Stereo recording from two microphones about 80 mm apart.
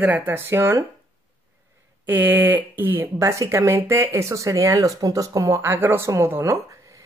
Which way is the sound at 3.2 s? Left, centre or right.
Right.